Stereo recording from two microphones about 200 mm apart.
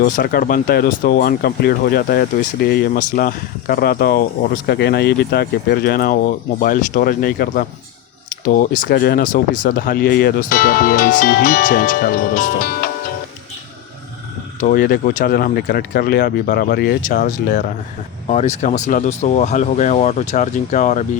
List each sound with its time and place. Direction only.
0.0 s speech: 45° left (ahead or behind)
14.6 s speech: 45° left (ahead or behind)